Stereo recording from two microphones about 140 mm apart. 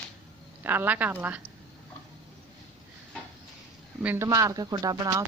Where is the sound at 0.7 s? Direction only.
10° right (ahead or behind).